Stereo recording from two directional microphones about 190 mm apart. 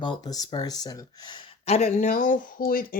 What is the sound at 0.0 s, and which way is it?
Speech, 20° left (ahead or behind).